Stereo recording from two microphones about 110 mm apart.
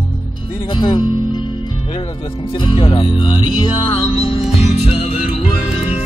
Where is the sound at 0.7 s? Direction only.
45° left (ahead or behind).